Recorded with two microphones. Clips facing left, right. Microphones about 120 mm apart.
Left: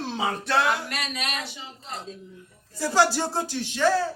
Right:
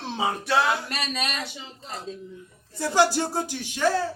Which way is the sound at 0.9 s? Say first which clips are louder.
Right 2 dB; 30° right (ahead or behind).